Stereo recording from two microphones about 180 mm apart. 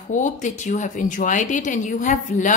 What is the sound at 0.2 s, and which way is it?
A woman's voice, 40° left (ahead or behind).